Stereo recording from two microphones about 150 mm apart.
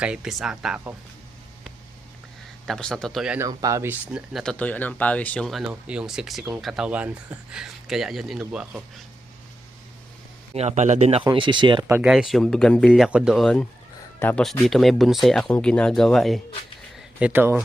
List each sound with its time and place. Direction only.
0.0 s speech: 5° right (ahead or behind)
2.6 s speech: 5° left (ahead or behind)
3.3 s speech: 20° right (ahead or behind); by 4.5 s centre (ahead or behind)
4.5 s speech: 10° left (ahead or behind); by 8.8 s 5° right (ahead or behind)
10.5 s a man's voice: 45° right (ahead or behind)
11.3 s speech: 30° right (ahead or behind)
12.0 s speech: 5° right (ahead or behind)
12.9 s speech: 5° right (ahead or behind); by 14.4 s 10° left (ahead or behind)
14.7 s speech: centre (ahead or behind)
17.2 s speech: 10° right (ahead or behind)